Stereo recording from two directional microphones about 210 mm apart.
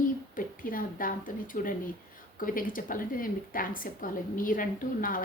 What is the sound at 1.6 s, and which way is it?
A woman's voice, 40° left (ahead or behind).